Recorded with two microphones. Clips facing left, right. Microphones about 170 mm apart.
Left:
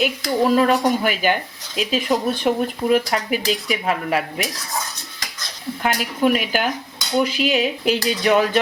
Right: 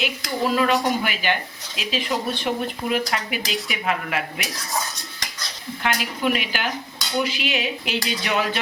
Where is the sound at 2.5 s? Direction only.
45° left (ahead or behind).